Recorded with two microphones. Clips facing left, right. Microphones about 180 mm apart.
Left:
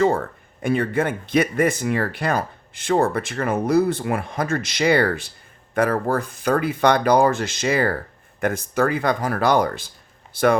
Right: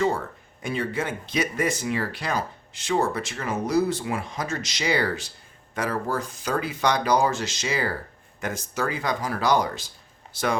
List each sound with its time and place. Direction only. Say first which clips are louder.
0.0 s speech: left 5 dB; 55° left (ahead or behind)